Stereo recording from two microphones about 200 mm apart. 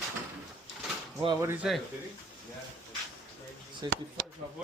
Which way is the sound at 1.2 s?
25° right (ahead or behind).